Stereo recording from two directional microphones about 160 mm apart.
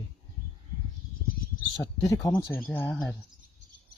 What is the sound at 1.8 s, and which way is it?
Speech, 25° left (ahead or behind).